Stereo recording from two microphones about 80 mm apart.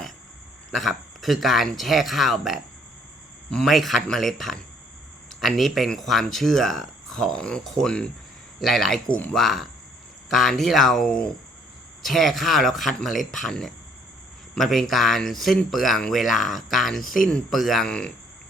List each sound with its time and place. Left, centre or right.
0.7 s speech: centre